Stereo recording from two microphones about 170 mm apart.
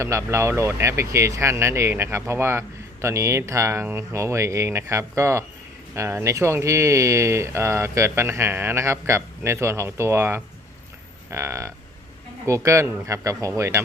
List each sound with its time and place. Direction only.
0.0 s speech: 15° right (ahead or behind)